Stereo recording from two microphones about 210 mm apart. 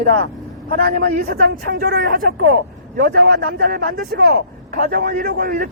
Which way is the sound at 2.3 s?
70° right (ahead or behind).